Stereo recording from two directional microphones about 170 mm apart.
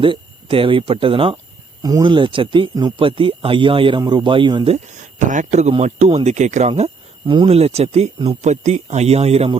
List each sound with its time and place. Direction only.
0.0 s speech: 30° right (ahead or behind)
5.3 s speech: 45° right (ahead or behind)